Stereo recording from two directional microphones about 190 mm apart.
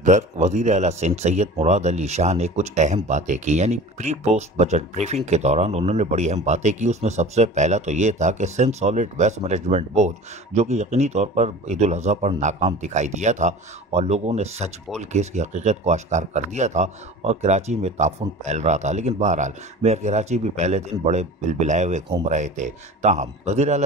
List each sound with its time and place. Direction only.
0.0 s speech: 40° right (ahead or behind)